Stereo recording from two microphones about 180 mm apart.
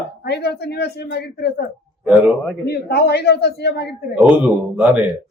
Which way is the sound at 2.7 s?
65° left (ahead or behind).